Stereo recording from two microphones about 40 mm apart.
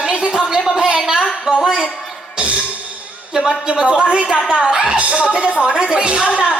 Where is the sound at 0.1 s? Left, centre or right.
Right.